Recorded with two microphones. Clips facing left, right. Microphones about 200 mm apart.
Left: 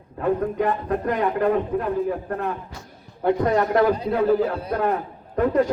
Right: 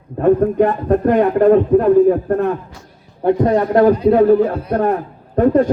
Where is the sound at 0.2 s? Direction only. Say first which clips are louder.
Right 9 dB; 50° right (ahead or behind).